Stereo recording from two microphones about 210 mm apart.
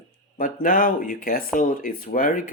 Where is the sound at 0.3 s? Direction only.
40° left (ahead or behind).